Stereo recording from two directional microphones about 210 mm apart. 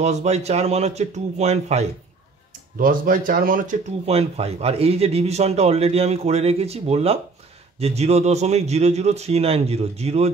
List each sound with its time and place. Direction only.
0.0 s speech: 30° right (ahead or behind)
4.0 s speech: 30° right (ahead or behind)